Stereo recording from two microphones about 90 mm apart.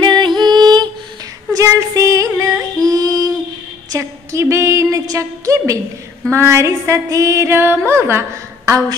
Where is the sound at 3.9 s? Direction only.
35° right (ahead or behind).